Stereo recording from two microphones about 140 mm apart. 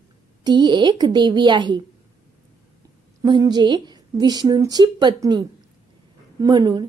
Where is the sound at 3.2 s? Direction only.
30° right (ahead or behind).